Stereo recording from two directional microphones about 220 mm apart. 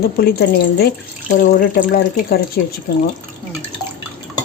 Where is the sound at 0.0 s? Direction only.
45° left (ahead or behind).